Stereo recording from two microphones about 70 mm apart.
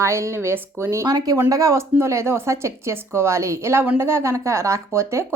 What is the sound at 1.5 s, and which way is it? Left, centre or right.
Speech, right.